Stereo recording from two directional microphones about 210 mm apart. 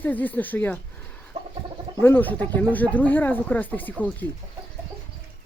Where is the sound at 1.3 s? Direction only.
30° right (ahead or behind).